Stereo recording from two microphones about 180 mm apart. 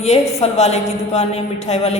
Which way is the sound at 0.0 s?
40° left (ahead or behind).